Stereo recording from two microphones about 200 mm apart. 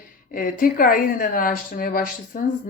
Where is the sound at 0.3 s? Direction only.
45° left (ahead or behind).